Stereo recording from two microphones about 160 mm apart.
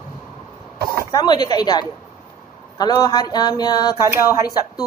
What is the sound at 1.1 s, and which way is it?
A woman's voice, 25° left (ahead or behind).